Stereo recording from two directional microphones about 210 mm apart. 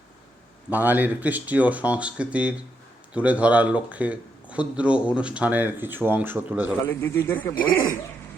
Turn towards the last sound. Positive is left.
turn(degrees=10)  # may be behind; listen again after turning